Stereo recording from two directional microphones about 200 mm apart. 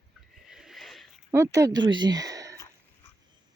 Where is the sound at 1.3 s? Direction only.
15° right (ahead or behind).